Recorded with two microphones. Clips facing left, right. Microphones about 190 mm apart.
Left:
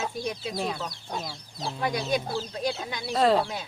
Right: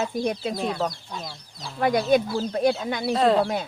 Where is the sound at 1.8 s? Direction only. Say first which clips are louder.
Right 8 dB; 55° right (ahead or behind).